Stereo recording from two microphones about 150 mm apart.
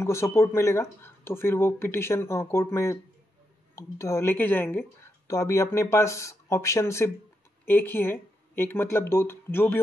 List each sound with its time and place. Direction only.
0.0 s speech: 20° left (ahead or behind)